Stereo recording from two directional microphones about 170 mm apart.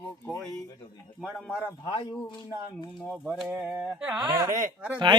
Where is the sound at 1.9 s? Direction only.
30° left (ahead or behind).